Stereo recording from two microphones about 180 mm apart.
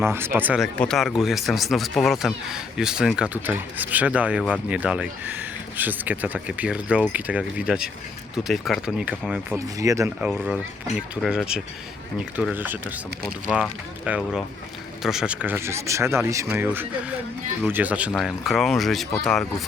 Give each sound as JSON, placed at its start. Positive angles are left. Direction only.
{"t": 0.0, "sound": "speech", "side_deg": -15}
{"t": 9.7, "sound": "speech", "side_deg": -20}
{"t": 10.2, "sound": "speech", "side_deg": -5}